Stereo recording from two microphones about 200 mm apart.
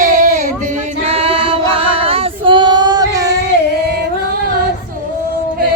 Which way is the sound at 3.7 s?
50° right (ahead or behind).